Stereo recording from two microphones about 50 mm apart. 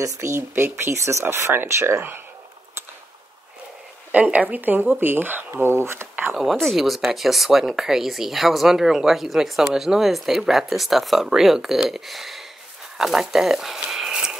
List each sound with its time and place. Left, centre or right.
0.0 s speech: right
1.2 s speech: right
4.1 s speech: right
5.5 s speech: right
6.6 s speech: centre
13.7 s a sound: centre